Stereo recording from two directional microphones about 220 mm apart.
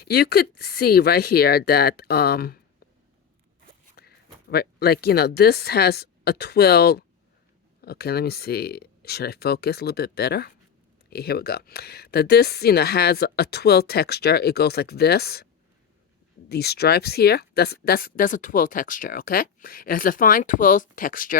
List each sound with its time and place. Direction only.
0.0 s speech: 45° left (ahead or behind)
4.5 s speech: 45° left (ahead or behind)
16.5 s speech: 45° left (ahead or behind)